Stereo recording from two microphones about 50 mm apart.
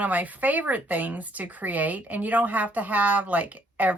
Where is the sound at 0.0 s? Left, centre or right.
Right.